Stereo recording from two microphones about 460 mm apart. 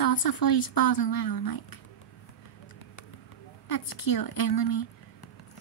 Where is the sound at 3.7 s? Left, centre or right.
Left.